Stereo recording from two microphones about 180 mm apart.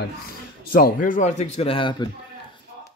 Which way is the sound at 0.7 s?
50° left (ahead or behind).